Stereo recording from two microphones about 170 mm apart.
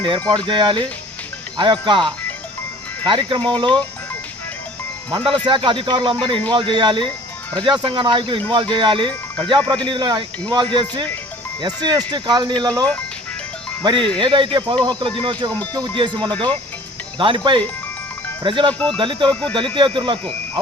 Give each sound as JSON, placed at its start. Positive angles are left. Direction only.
{"t": 0.0, "sound": "speech", "side_deg": -30}
{"t": 5.5, "sound": "speech", "side_deg": -30}
{"t": 13.8, "sound": "speech", "side_deg": -30}
{"t": 18.7, "sound": "speech", "side_deg": 5}
{"t": 18.9, "sound": "speech", "side_deg": -30}